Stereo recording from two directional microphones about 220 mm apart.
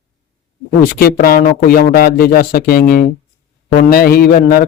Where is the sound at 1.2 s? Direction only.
40° left (ahead or behind).